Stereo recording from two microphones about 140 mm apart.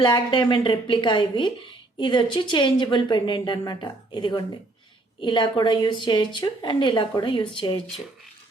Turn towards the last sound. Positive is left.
turn(degrees=30)  # may be behind; listen again after turning